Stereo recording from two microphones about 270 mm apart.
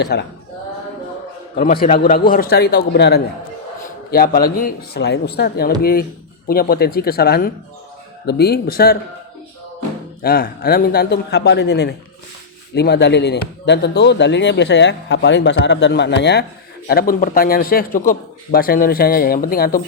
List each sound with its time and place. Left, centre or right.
0.0 s speech: left
1.5 s speech: left
10.2 s speech: left